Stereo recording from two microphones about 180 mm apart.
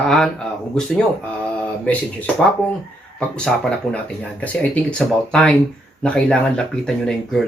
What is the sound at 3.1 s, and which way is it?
Speech, 5° left (ahead or behind).